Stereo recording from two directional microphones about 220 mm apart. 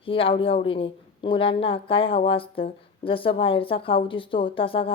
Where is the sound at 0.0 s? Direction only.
25° left (ahead or behind).